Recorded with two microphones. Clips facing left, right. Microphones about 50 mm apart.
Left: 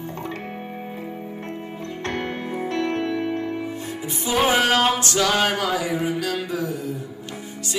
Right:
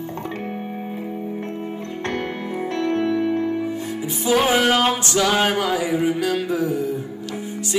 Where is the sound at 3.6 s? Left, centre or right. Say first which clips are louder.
Right 4 dB; centre.